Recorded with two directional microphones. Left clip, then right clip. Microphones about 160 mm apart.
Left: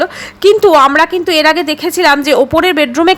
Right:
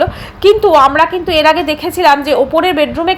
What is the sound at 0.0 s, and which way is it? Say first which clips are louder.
A woman's voice: even; 35° left (ahead or behind).